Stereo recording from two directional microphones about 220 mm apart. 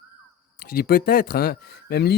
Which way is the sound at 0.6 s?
45° left (ahead or behind).